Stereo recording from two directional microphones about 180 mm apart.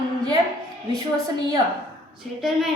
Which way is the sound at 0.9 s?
20° right (ahead or behind).